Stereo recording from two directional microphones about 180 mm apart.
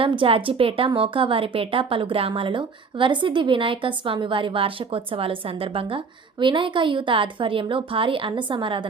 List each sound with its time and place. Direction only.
0.0 s a woman's voice: 30° right (ahead or behind)